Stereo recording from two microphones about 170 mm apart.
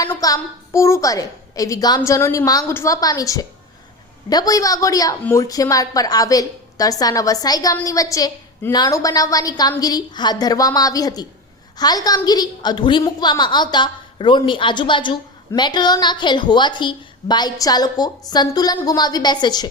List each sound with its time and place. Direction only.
0.1 s a woman's voice: 20° left (ahead or behind)